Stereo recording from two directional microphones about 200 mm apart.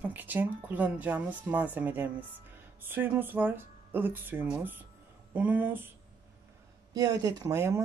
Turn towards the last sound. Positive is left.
turn(degrees=-15)  # may be behind; listen again after turning